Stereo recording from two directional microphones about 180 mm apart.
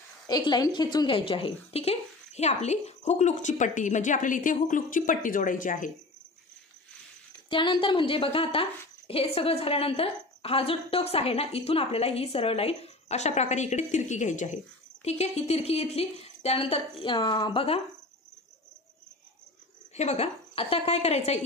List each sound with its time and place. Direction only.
0.3 s speech: 25° left (ahead or behind); by 5.9 s 50° left (ahead or behind)
7.4 s a woman's voice: 25° left (ahead or behind)
20.0 s speech: 35° left (ahead or behind)